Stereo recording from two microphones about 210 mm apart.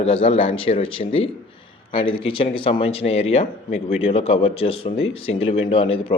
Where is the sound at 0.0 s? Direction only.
30° left (ahead or behind).